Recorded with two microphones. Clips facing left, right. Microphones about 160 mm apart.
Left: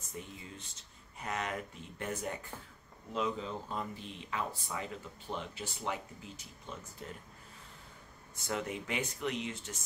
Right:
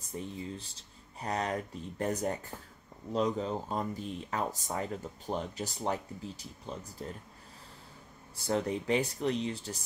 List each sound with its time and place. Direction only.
0.2 s speech: 35° right (ahead or behind)
8.4 s speech: 35° right (ahead or behind)